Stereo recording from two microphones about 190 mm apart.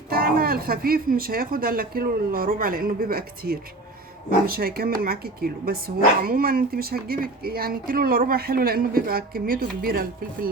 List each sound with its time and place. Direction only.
0.1 s speech: 50° right (ahead or behind)